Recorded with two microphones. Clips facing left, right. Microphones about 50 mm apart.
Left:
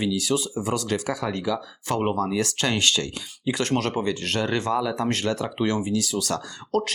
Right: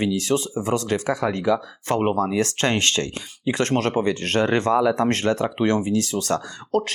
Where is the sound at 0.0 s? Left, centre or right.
Right.